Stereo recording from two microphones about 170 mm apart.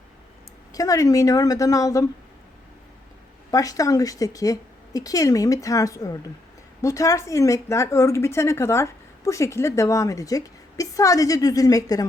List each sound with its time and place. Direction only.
0.7 s a woman's voice: 20° left (ahead or behind)
3.5 s a woman's voice: 20° left (ahead or behind)